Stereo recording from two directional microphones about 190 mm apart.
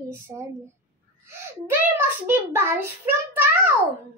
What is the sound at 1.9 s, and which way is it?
A child's voice, 10° right (ahead or behind).